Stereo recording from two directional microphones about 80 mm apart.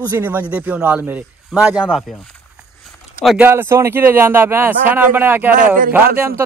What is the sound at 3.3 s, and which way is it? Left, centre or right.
Speech, right.